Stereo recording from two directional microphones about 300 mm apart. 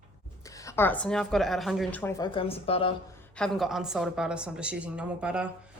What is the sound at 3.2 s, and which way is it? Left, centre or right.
Speech, centre.